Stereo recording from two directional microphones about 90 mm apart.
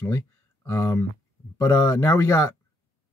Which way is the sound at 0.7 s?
30° left (ahead or behind).